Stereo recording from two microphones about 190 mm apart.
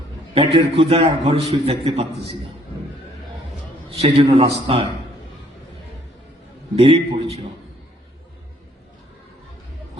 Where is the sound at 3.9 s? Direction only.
30° right (ahead or behind).